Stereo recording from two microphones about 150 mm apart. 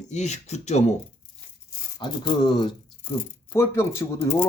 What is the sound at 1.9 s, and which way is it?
Speech, 30° left (ahead or behind).